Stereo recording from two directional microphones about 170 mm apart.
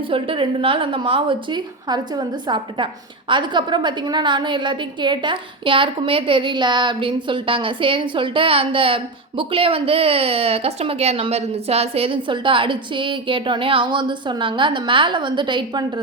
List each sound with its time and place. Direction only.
0.1 s a woman's voice: 30° right (ahead or behind)